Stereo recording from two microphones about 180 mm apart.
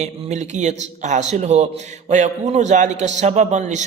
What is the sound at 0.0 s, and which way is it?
A man's voice, 40° right (ahead or behind).